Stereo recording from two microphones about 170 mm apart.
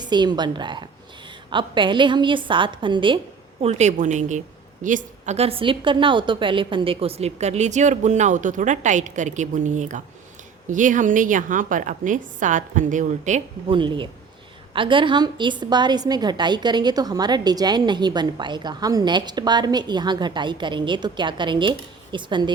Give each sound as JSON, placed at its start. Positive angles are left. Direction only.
{"t": 0.0, "sound": "a woman's voice", "side_deg": -25}
{"t": 3.6, "sound": "a woman's voice", "side_deg": -40}
{"t": 13.7, "sound": "a woman's voice", "side_deg": -30}